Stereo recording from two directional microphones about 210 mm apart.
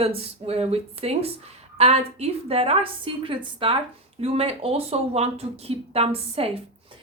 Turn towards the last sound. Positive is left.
turn(degrees=-30)  # may be behind; listen again after turning